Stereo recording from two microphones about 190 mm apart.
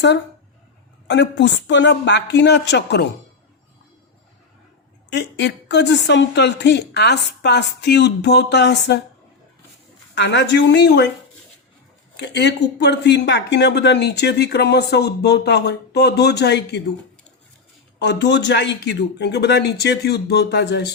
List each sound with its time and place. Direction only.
1.0 s a woman's voice: 70° left (ahead or behind)
5.1 s speech: 65° left (ahead or behind)
10.2 s speech: 70° left (ahead or behind)
12.1 s speech: 65° left (ahead or behind)
18.0 s speech: 65° left (ahead or behind)